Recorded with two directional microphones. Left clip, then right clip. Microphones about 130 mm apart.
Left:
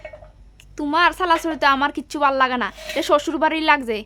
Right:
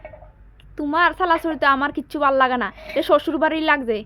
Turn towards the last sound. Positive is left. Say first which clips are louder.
# left 1 dB
turn(degrees=5)  # may be behind; listen again after turning